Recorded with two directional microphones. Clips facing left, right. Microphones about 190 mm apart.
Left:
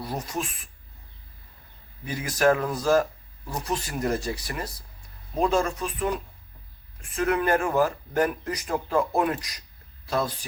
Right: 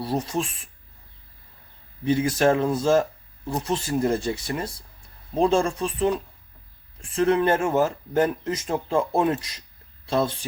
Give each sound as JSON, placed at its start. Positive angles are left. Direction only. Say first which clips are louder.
{"t": 0.0, "sound": "speech", "louder": "right 5 dB", "side_deg": -30}
{"t": 2.0, "sound": "speech", "louder": "right 3 dB", "side_deg": -25}